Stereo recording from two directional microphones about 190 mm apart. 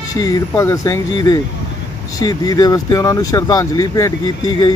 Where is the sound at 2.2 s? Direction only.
20° left (ahead or behind).